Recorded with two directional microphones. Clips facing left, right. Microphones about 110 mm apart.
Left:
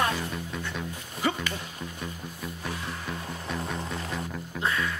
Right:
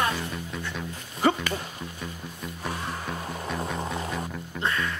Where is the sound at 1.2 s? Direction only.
45° right (ahead or behind).